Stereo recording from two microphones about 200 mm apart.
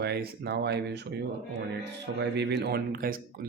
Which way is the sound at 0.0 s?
55° right (ahead or behind).